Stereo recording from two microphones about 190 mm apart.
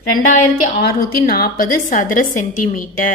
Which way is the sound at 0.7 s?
55° left (ahead or behind).